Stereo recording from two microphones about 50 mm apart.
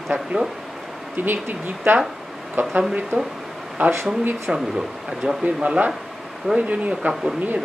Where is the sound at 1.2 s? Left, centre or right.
Right.